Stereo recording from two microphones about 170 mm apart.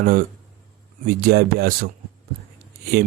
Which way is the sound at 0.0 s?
60° right (ahead or behind).